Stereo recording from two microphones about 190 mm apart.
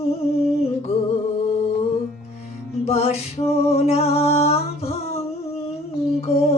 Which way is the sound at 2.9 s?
30° left (ahead or behind).